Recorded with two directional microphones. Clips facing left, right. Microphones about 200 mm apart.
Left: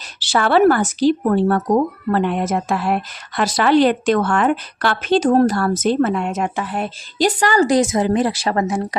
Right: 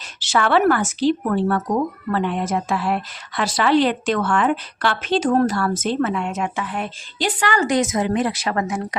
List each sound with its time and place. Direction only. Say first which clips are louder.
0.2 s speech: left 3 dB; 35° left (ahead or behind)